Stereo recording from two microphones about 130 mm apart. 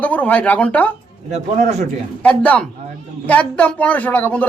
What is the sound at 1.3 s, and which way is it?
Speech, 55° right (ahead or behind).